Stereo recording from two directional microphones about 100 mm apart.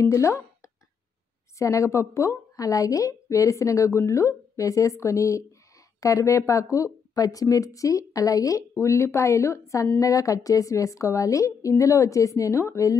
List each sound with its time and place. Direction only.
0.0 s speech: 30° left (ahead or behind)
1.6 s speech: 30° left (ahead or behind)